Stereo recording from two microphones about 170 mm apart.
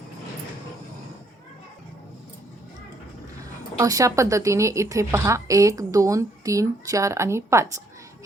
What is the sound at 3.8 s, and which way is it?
A woman's voice, 20° right (ahead or behind).